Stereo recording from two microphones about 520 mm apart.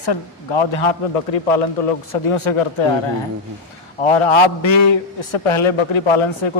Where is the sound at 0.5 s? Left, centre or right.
Left.